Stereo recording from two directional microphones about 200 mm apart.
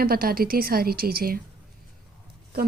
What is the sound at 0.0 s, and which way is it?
A woman's voice, 50° right (ahead or behind).